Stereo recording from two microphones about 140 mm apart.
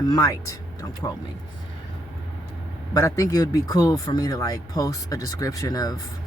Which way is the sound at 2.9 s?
25° left (ahead or behind).